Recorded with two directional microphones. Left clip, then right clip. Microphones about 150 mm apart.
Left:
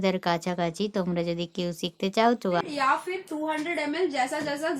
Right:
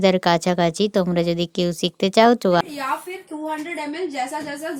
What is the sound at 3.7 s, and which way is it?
Speech, 5° left (ahead or behind).